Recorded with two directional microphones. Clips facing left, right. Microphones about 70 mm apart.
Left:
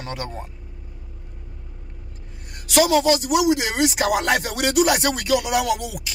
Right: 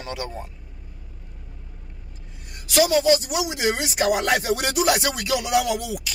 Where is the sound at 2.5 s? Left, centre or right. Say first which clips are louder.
Left 2 dB; left.